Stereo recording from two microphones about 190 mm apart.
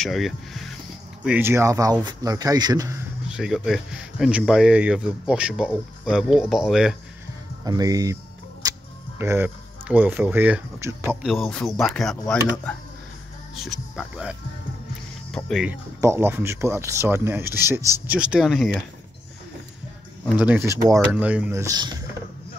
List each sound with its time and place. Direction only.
0.0 s speech: centre (ahead or behind); by 3.0 s 20° right (ahead or behind)
3.3 s speech: centre (ahead or behind)
7.6 s speech: 20° right (ahead or behind)
9.2 s speech: 10° right (ahead or behind)
11.2 s speech: centre (ahead or behind)
13.7 s speech: 5° right (ahead or behind)
15.3 s speech: centre (ahead or behind)
20.3 s speech: 10° right (ahead or behind)